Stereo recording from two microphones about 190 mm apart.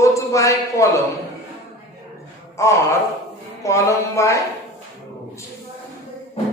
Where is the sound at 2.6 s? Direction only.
15° left (ahead or behind).